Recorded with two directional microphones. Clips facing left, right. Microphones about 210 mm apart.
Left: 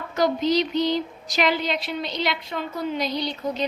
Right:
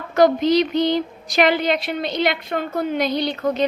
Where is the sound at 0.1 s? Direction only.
55° right (ahead or behind).